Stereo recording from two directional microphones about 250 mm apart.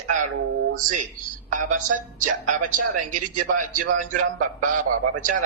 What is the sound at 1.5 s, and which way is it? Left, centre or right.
A woman's voice, right.